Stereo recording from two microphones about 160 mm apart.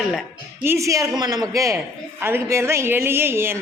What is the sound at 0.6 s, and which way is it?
A man's voice, 15° right (ahead or behind).